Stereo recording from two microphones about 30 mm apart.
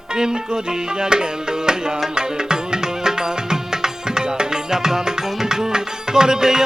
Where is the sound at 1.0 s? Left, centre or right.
Right.